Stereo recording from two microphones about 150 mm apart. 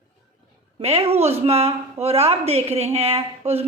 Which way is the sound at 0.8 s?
45° right (ahead or behind).